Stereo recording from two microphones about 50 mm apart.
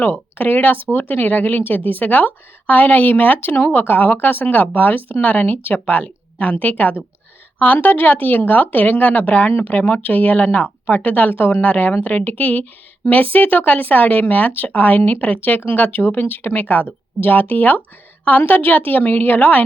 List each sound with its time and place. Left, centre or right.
0.0 s speech: left
3.5 s speech: left
3.8 s speech: left